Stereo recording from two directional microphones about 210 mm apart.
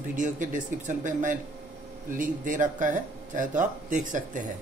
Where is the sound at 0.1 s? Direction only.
40° right (ahead or behind).